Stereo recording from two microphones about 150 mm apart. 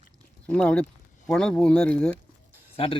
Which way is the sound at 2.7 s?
40° left (ahead or behind).